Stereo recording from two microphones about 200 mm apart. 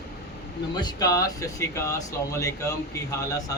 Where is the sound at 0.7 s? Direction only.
20° left (ahead or behind).